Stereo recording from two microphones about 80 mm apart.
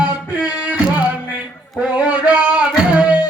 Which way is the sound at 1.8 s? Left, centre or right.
Centre.